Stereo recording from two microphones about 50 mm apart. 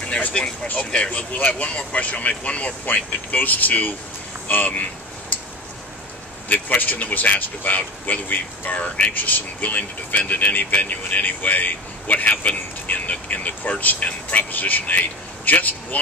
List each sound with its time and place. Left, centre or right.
0.3 s speech: centre
1.3 s speech: left
6.5 s speech: left